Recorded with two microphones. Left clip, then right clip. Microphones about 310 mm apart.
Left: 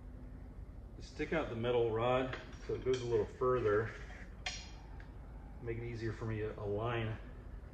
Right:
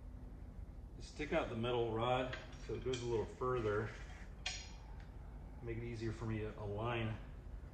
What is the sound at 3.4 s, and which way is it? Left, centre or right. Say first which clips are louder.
Speech: left 6 dB; centre.